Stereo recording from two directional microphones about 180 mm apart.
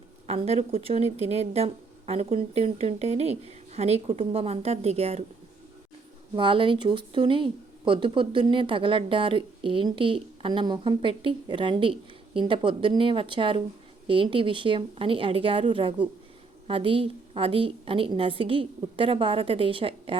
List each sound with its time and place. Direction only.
0.3 s a woman's voice: 35° right (ahead or behind)
6.3 s a woman's voice: 30° right (ahead or behind)